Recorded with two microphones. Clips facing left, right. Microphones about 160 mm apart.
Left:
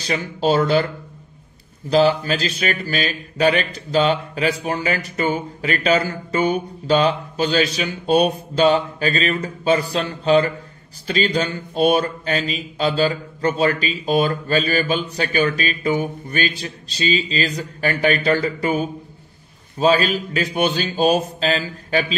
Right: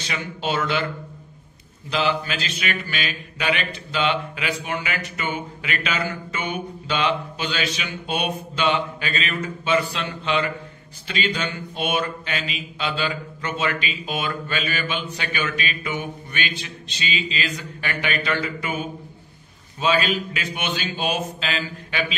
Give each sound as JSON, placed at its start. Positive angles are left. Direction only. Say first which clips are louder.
{"t": 0.0, "sound": "speech", "louder": "left 7 dB", "side_deg": 35}
{"t": 1.9, "sound": "speech", "louder": "left 8 dB", "side_deg": 40}